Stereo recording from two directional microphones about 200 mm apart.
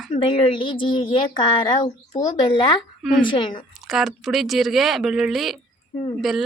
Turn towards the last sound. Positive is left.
turn(degrees=0)  # may be behind; listen again after turning